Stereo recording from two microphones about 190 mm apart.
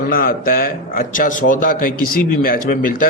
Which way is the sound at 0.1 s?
50° left (ahead or behind).